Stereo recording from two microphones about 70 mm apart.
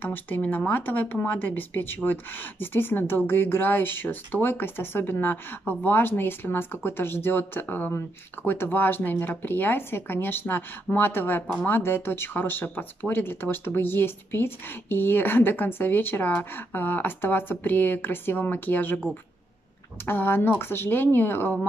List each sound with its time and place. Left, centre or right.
0.0 s speech: left
20.1 s speech: left